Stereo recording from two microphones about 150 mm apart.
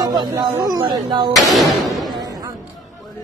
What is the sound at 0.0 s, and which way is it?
Music, 25° right (ahead or behind).